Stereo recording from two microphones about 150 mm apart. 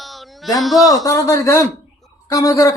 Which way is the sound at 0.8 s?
25° left (ahead or behind).